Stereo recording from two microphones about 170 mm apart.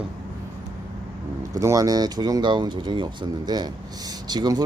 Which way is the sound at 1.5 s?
20° right (ahead or behind).